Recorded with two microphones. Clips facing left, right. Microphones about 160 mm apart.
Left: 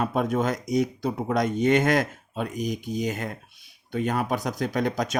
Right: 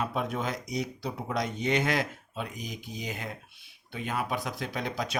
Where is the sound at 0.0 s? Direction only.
50° left (ahead or behind).